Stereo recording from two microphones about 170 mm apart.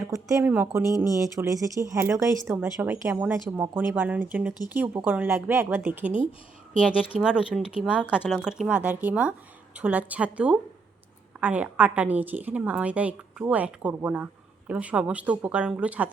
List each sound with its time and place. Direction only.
0.1 s speech: 20° right (ahead or behind)